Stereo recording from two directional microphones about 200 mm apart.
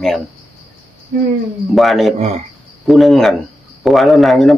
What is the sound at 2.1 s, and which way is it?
Speech, 35° right (ahead or behind).